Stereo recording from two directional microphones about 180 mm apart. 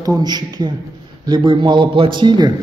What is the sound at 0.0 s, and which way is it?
A man's voice, 20° right (ahead or behind).